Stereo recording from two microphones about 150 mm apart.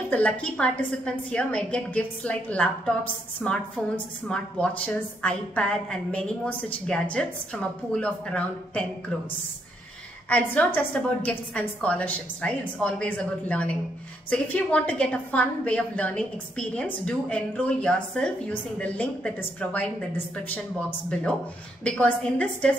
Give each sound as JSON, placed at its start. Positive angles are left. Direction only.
{"t": 0.1, "sound": "a woman's voice", "side_deg": 10}
{"t": 10.3, "sound": "a woman's voice", "side_deg": 10}